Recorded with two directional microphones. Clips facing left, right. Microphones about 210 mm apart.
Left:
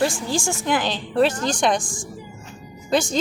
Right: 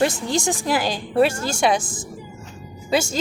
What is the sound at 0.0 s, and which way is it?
A woman's voice, 20° right (ahead or behind).